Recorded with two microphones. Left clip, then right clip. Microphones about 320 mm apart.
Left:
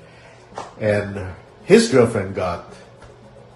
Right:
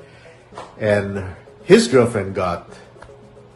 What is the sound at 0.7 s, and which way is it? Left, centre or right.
A man's voice, centre.